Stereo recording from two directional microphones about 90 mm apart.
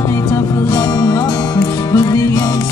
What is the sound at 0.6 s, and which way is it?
Music, 35° left (ahead or behind).